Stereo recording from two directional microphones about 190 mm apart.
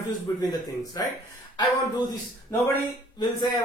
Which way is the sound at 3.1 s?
25° left (ahead or behind).